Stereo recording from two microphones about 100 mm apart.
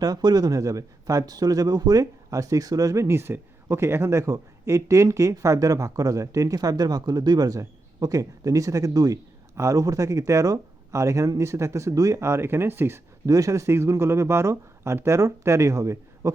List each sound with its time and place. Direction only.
0.0 s speech: 40° right (ahead or behind)